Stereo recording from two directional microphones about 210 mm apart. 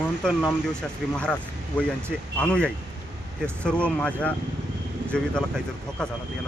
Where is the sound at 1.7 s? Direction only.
5° left (ahead or behind).